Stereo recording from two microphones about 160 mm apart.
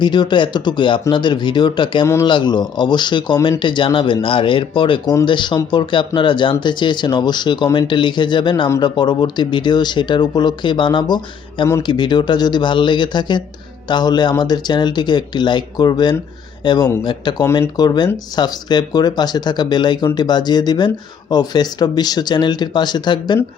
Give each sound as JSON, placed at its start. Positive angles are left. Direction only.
{"t": 0.0, "sound": "speech", "side_deg": 30}